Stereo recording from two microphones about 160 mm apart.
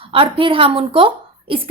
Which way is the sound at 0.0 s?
35° right (ahead or behind).